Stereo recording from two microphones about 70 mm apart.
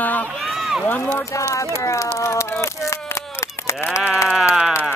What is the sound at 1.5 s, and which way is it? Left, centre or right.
Speech, left.